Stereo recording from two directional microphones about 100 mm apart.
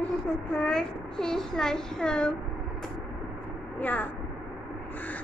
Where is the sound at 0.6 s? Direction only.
5° left (ahead or behind).